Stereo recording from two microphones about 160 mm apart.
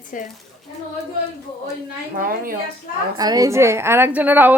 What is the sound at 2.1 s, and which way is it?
Speech, 60° right (ahead or behind).